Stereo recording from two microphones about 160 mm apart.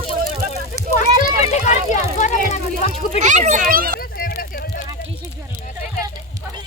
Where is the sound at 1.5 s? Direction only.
50° left (ahead or behind).